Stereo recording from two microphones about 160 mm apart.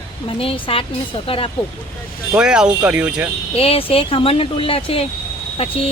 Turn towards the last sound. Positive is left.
turn(degrees=40)  # may be behind; listen again after turning